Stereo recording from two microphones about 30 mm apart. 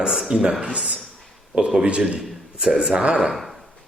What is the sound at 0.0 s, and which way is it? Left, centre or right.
Speech, right.